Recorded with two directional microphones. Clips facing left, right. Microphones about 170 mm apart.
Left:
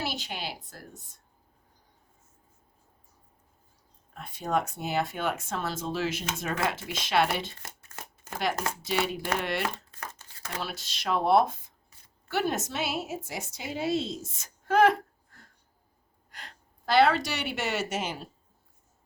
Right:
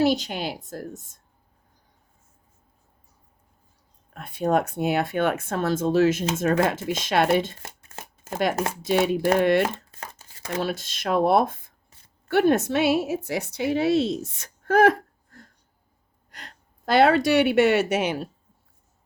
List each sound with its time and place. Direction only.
0.0 s speech: 45° right (ahead or behind)
4.1 s speech: 60° right (ahead or behind)
7.6 s shuffling cards: 25° right (ahead or behind)
8.8 s speech: 50° right (ahead or behind)
9.6 s crumpling: 20° right (ahead or behind)
10.6 s a woman's voice: 50° right (ahead or behind); by 18.3 s 65° right (ahead or behind)